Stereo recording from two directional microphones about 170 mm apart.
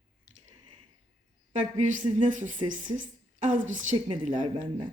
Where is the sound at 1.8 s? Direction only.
50° right (ahead or behind).